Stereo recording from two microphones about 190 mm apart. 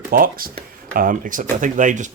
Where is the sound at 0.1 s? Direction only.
50° right (ahead or behind).